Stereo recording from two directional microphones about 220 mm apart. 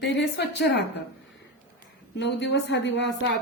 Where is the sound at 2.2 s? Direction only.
50° left (ahead or behind).